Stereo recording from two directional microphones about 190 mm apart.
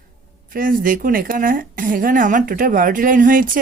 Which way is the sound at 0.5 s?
45° right (ahead or behind).